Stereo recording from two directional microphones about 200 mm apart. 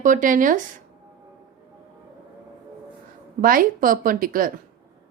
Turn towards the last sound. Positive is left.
turn(degrees=-45)  # may be behind; listen again after turning